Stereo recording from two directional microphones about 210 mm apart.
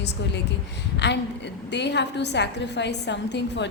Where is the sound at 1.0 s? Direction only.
55° left (ahead or behind).